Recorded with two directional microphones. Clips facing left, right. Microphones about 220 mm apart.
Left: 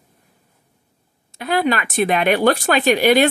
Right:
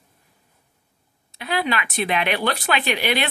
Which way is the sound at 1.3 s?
50° left (ahead or behind).